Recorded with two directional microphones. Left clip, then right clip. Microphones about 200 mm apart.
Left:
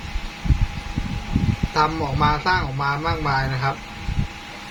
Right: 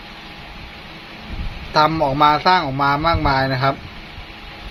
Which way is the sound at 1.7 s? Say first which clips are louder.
Right 6 dB; 45° right (ahead or behind).